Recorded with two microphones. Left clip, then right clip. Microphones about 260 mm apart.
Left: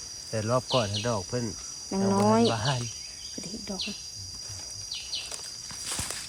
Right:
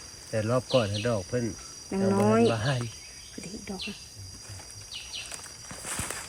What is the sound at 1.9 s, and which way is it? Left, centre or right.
Cricket, left.